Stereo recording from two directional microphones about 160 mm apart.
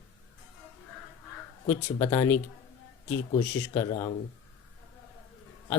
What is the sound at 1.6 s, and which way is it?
Speech, 15° left (ahead or behind).